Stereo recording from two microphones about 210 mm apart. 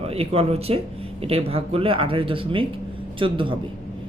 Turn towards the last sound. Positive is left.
turn(degrees=-25)  # may be behind; listen again after turning